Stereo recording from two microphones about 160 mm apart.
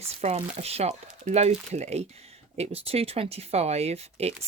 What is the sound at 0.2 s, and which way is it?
Speech, 40° right (ahead or behind).